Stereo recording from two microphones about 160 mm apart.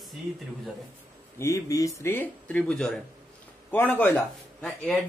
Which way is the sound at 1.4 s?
15° left (ahead or behind).